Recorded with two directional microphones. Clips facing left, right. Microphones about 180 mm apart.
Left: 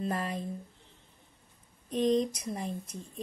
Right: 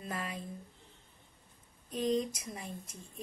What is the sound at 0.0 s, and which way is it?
Speech, 40° left (ahead or behind).